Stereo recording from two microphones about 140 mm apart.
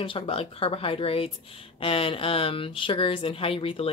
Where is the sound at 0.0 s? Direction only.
40° left (ahead or behind).